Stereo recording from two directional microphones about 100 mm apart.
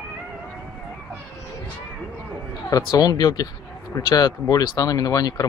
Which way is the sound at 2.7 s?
35° left (ahead or behind).